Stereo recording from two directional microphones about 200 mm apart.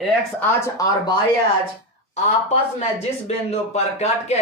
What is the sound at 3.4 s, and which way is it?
Speech, 35° left (ahead or behind).